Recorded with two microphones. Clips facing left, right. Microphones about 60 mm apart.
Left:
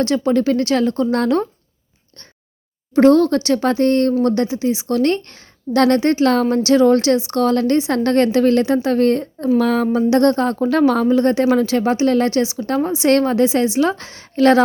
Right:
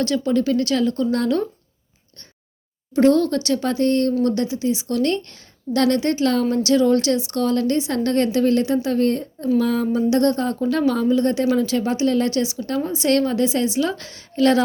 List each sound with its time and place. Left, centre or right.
0.3 s speech: left
2.9 s speech: left
4.4 s speech: left
4.9 s a woman's voice: left